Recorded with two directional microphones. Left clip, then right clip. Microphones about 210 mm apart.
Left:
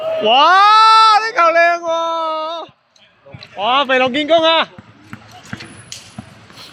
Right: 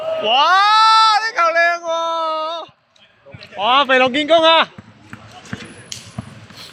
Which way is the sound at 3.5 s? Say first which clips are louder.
Right 1 dB; 5° left (ahead or behind).